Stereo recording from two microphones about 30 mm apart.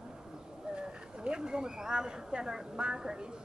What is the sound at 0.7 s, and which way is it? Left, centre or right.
Speech, right.